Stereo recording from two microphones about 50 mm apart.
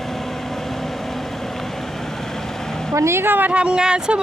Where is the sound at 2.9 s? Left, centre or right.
Right.